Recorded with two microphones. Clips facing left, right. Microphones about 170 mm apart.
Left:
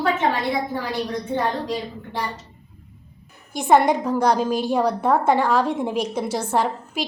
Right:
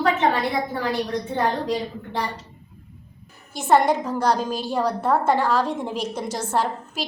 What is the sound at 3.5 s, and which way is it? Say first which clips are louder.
A woman's voice: left 2 dB; 10° left (ahead or behind).